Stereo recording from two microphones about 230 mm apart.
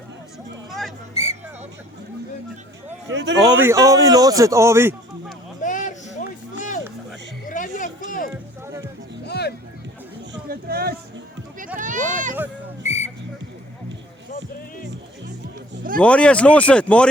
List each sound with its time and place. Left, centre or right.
0.7 s hubbub: centre
1.1 s a sound: left
3.1 s speech: right
3.6 s speech: centre
5.5 s a sound: left
7.4 s music: left
8.6 s music: centre
9.2 s music: left
10.3 s a sound: right
12.8 s whistle: left
16.0 s speech: centre